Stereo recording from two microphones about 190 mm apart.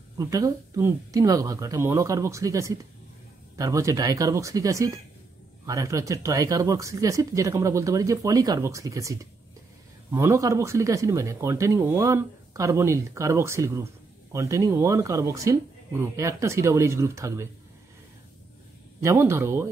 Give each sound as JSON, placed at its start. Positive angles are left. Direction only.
{"t": 0.2, "sound": "speech", "side_deg": -15}
{"t": 18.9, "sound": "speech", "side_deg": -15}